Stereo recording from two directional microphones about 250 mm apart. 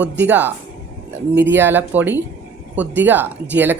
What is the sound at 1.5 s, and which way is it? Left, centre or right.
Speech, centre.